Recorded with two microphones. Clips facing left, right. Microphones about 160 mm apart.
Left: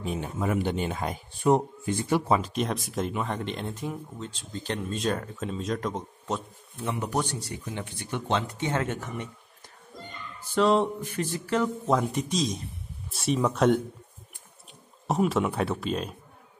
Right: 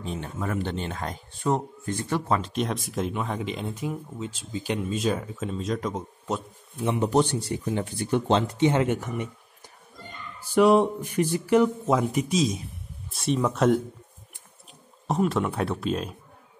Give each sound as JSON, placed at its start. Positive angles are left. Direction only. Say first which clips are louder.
{"t": 0.0, "sound": "speech", "louder": "left 2 dB", "side_deg": 10}
{"t": 6.8, "sound": "a man's voice", "louder": "right 7 dB", "side_deg": -20}
{"t": 8.5, "sound": "speech", "louder": "right 7 dB", "side_deg": -20}
{"t": 10.5, "sound": "speech", "louder": "right 4 dB", "side_deg": -10}
{"t": 15.0, "sound": "speech", "louder": "even", "side_deg": 0}